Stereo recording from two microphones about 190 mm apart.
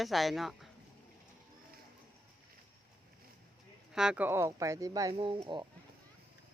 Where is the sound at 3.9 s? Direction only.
5° right (ahead or behind); by 5.7 s 25° right (ahead or behind).